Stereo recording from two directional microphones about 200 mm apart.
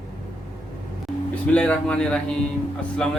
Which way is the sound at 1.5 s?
5° left (ahead or behind).